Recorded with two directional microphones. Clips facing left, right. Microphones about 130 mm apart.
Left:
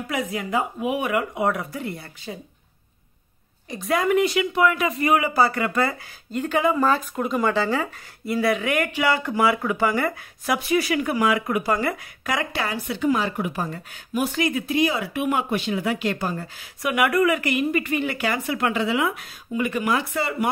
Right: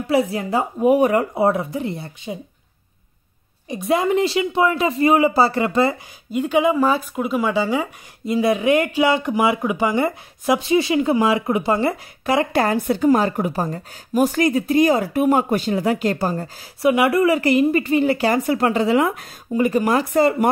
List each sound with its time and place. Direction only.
0.0 s a woman's voice: 30° right (ahead or behind)
3.6 s speech: 20° right (ahead or behind)
6.3 s speech: 10° right (ahead or behind); by 12.4 s 30° right (ahead or behind)
12.5 s a woman's voice: 45° right (ahead or behind)
16.9 s a woman's voice: 25° right (ahead or behind)